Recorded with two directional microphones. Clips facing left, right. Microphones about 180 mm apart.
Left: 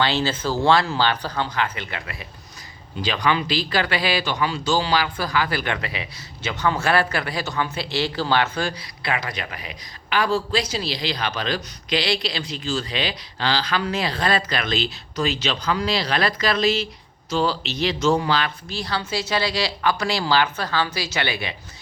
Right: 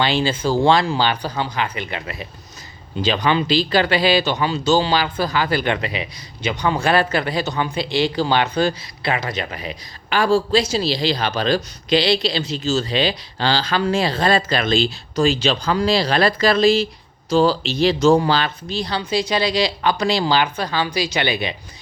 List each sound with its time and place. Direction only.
0.0 s speech: 15° right (ahead or behind)